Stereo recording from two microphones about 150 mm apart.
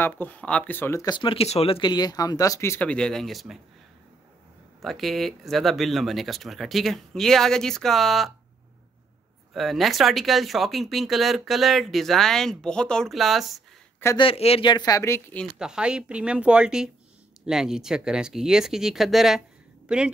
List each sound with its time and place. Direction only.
0.0 s speech: 10° left (ahead or behind)
1.0 s speech: 35° left (ahead or behind); by 3.5 s centre (ahead or behind)
4.8 s speech: centre (ahead or behind)
9.5 s speech: centre (ahead or behind)
14.1 s speech: 40° left (ahead or behind); by 15.2 s 20° left (ahead or behind)
15.6 s speech: 5° right (ahead or behind)